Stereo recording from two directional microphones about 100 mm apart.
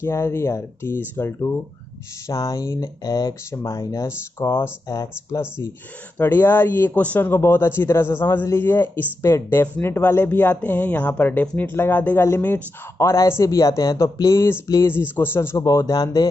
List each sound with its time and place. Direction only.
0.0 s speech: 25° left (ahead or behind)
4.4 s speech: 25° left (ahead or behind)
6.1 s speech: 20° left (ahead or behind)
15.6 s speech: 35° left (ahead or behind)